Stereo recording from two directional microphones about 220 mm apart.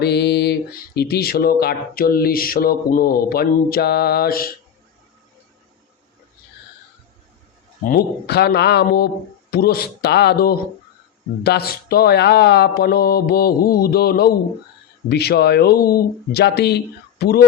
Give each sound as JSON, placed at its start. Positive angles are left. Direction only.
{"t": 0.0, "sound": "speech", "side_deg": 50}
{"t": 7.9, "sound": "speech", "side_deg": 45}